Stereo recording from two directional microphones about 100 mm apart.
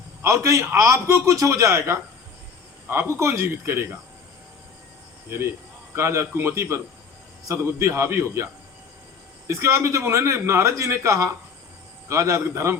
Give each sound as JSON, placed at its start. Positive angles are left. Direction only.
{"t": 0.2, "sound": "a man's voice", "side_deg": -30}
{"t": 5.9, "sound": "a man's voice", "side_deg": -25}
{"t": 9.5, "sound": "a man's voice", "side_deg": -30}